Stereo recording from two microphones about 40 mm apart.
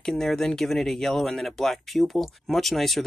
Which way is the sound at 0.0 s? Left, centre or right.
Centre.